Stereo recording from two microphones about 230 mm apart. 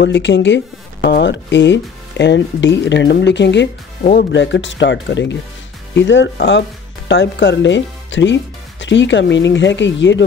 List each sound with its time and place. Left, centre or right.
0.0 s speech: left
4.0 s speech: left
4.3 s speech: left